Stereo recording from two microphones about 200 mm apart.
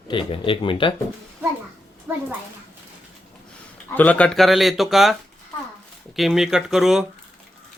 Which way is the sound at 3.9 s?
5° left (ahead or behind).